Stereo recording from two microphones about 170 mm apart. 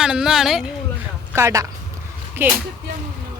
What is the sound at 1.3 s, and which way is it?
Speech, 15° right (ahead or behind).